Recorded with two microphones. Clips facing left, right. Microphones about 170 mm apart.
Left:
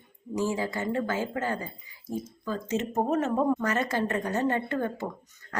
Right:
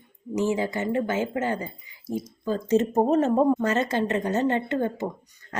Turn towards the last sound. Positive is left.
turn(degrees=-20)  # may be behind; listen again after turning